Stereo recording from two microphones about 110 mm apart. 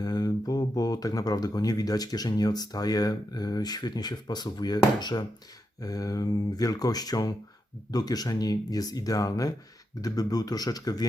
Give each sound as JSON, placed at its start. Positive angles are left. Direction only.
{"t": 0.0, "sound": "speech", "side_deg": 35}